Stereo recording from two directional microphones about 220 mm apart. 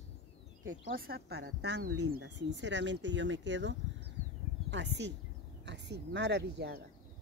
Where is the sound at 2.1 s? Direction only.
50° right (ahead or behind).